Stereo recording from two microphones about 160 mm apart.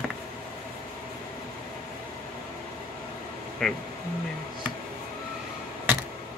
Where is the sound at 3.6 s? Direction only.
5° left (ahead or behind).